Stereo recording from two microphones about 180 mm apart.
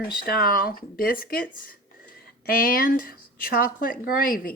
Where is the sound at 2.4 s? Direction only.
50° left (ahead or behind).